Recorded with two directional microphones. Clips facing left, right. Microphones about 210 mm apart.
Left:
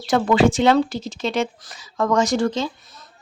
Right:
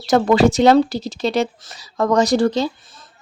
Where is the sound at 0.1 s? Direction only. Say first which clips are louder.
Right 3 dB; 40° right (ahead or behind).